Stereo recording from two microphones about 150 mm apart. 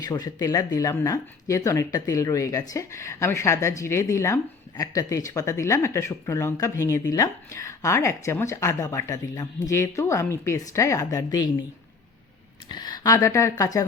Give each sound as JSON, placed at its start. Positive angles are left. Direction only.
{"t": 0.0, "sound": "speech", "side_deg": 25}
{"t": 12.6, "sound": "speech", "side_deg": 30}